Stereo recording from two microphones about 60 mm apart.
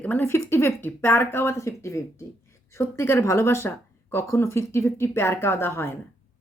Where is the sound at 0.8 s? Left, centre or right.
Left.